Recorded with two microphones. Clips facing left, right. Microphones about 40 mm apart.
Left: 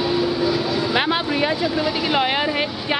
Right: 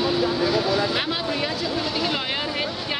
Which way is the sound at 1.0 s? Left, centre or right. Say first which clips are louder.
Left 6 dB; left.